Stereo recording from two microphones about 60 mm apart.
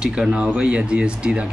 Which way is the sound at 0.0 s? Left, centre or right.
Centre.